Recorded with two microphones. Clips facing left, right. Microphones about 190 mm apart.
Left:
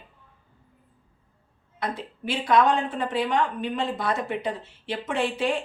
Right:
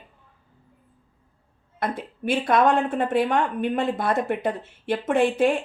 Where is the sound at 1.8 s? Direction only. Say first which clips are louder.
Right 3 dB; 50° right (ahead or behind).